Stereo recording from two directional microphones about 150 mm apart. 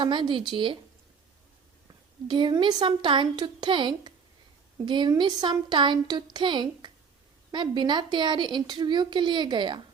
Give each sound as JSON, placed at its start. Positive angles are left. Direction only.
{"t": 0.0, "sound": "a woman's voice", "side_deg": -30}
{"t": 2.2, "sound": "a woman's voice", "side_deg": -30}